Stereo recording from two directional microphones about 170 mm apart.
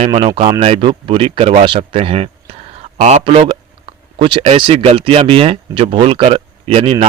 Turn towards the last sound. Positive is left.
turn(degrees=-35)  # may be behind; listen again after turning